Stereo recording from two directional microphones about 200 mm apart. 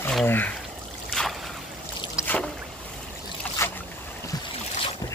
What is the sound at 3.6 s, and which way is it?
Boat, 15° left (ahead or behind).